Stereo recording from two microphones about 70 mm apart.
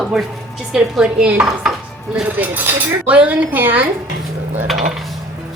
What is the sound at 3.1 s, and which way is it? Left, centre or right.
Speech, centre.